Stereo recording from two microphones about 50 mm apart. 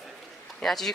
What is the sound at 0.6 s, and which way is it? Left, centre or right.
Speech, centre.